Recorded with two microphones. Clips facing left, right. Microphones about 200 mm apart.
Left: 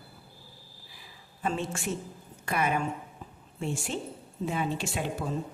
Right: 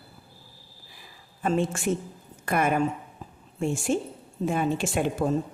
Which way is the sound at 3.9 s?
50° right (ahead or behind).